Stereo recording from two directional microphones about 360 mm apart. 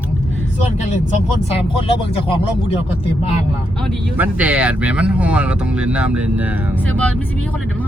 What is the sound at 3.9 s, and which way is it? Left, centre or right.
Speech, centre.